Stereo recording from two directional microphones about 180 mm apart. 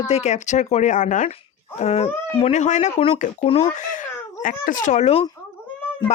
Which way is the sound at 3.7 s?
45° left (ahead or behind).